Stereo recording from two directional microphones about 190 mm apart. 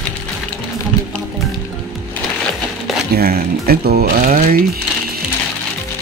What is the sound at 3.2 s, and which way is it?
Speech, 55° right (ahead or behind).